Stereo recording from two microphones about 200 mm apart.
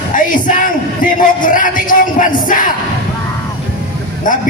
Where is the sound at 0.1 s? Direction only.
40° left (ahead or behind).